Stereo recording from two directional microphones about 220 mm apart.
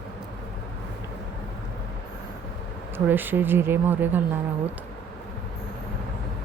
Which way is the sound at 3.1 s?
10° right (ahead or behind).